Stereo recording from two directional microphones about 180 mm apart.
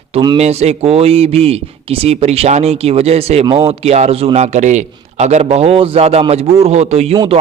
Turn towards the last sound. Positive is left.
turn(degrees=-35)  # may be behind; listen again after turning